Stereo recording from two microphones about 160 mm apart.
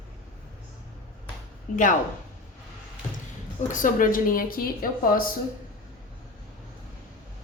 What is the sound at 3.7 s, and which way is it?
Speech, 55° left (ahead or behind).